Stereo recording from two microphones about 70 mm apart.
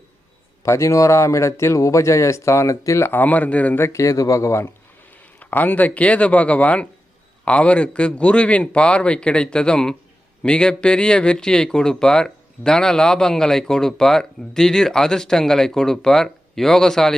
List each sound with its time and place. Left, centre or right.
0.6 s speech: left
3.1 s speech: left
3.8 s speech: left
5.1 s a man's voice: left; by 17.2 s centre